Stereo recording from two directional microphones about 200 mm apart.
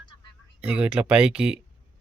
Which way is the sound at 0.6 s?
5° right (ahead or behind).